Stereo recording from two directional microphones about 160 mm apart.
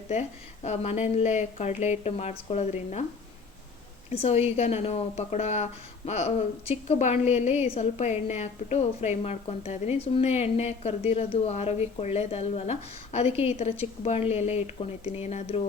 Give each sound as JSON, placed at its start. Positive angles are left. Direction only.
{"t": 0.1, "sound": "a woman's voice", "side_deg": 45}
{"t": 4.1, "sound": "a woman's voice", "side_deg": 40}